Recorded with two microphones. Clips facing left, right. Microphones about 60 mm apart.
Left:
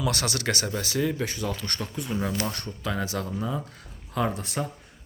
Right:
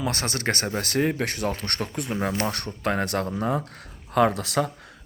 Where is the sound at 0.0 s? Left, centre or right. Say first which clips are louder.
Right 1 dB; right.